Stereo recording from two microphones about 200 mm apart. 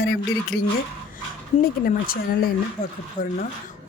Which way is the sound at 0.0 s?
55° left (ahead or behind).